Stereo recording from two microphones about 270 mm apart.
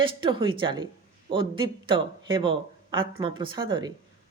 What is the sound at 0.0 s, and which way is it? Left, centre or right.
A woman's voice, centre.